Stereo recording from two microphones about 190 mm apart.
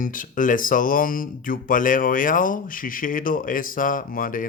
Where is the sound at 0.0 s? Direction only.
45° left (ahead or behind).